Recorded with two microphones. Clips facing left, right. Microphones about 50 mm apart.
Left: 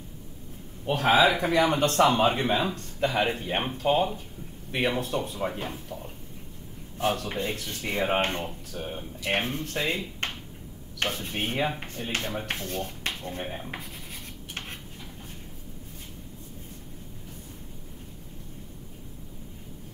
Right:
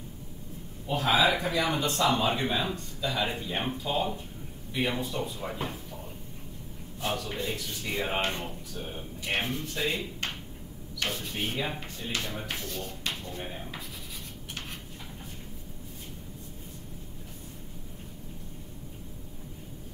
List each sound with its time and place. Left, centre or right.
0.8 s a man's voice: left
7.0 s speech: left